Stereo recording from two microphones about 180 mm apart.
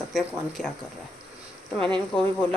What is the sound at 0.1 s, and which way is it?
Speech, centre (ahead or behind).